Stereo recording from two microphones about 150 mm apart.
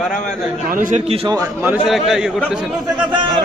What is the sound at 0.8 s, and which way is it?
Speech, 60° right (ahead or behind).